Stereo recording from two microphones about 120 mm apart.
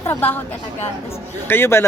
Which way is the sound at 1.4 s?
20° left (ahead or behind).